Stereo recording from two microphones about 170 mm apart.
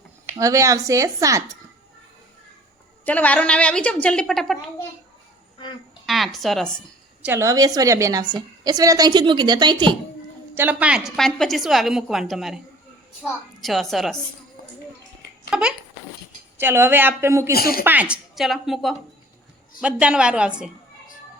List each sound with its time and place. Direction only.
0.3 s a woman's voice: 20° right (ahead or behind)
3.1 s a woman's voice: 10° left (ahead or behind)
6.1 s speech: centre (ahead or behind)
7.2 s a woman's voice: 15° right (ahead or behind)
10.5 s a woman's voice: 10° right (ahead or behind)
15.4 s speech: 5° right (ahead or behind)
17.5 s speech: 60° left (ahead or behind)
17.8 s a woman's voice: 10° right (ahead or behind)